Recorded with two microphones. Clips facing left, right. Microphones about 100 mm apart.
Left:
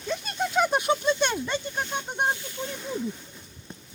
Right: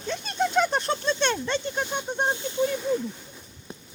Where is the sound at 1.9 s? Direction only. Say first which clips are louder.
Left 1 dB; 25° right (ahead or behind).